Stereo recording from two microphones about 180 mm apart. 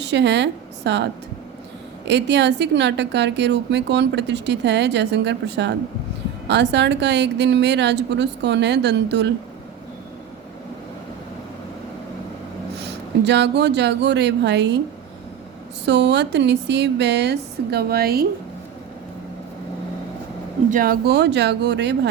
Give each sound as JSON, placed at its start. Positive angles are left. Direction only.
{"t": 0.0, "sound": "a woman's voice", "side_deg": -75}
{"t": 12.8, "sound": "speech", "side_deg": -70}
{"t": 15.9, "sound": "a woman's voice", "side_deg": -70}
{"t": 20.7, "sound": "a woman's voice", "side_deg": -50}